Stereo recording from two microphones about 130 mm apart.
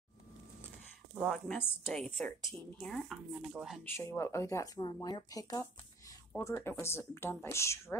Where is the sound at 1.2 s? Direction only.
Centre (ahead or behind).